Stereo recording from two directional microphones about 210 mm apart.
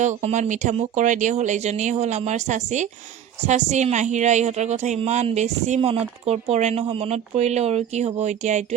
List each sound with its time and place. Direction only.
0.2 s a woman's voice: 35° right (ahead or behind)